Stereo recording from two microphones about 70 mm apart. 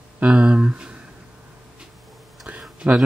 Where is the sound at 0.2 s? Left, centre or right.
Centre.